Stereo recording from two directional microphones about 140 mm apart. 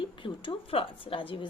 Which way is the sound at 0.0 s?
35° left (ahead or behind).